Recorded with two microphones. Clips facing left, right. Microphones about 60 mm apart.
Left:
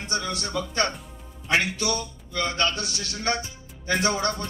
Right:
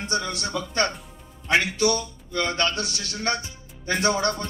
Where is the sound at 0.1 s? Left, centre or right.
Right.